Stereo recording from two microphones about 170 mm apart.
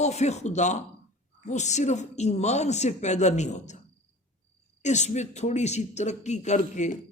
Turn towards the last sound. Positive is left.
turn(degrees=45)  # may be behind; listen again after turning